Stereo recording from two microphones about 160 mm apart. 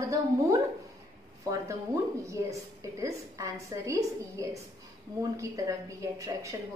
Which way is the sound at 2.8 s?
20° right (ahead or behind).